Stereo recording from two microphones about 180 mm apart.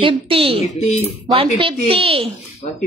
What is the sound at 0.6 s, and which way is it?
Speech, 35° left (ahead or behind).